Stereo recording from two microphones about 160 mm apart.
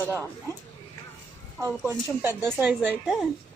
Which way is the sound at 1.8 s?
15° right (ahead or behind).